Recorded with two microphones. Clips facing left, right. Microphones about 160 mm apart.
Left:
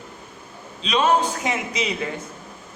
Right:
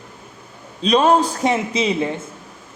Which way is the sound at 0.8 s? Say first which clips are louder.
Right 5 dB; 40° right (ahead or behind).